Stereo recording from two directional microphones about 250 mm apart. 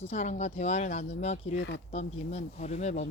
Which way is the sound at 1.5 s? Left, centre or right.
Left.